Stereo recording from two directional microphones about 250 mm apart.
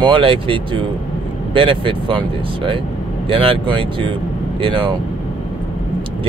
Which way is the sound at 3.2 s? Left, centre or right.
Right.